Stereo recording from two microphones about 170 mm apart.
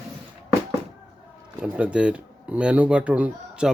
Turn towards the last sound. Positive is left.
turn(degrees=-5)  # may be behind; listen again after turning